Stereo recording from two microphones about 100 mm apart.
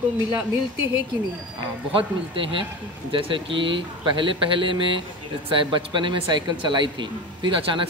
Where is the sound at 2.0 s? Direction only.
60° right (ahead or behind).